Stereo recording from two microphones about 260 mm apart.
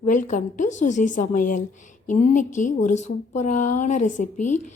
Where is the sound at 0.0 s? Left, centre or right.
Left.